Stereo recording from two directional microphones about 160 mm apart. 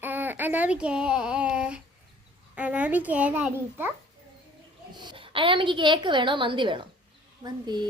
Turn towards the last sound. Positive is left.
turn(degrees=-25)  # may be behind; listen again after turning